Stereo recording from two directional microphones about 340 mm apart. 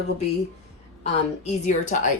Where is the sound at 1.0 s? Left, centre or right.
Centre.